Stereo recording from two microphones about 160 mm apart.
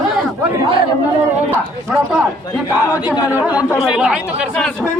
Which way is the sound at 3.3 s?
10° right (ahead or behind).